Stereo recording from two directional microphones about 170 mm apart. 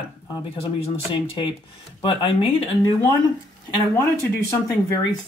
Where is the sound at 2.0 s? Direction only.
30° left (ahead or behind).